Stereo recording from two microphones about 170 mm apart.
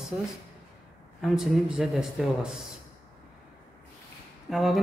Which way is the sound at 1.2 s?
Centre (ahead or behind).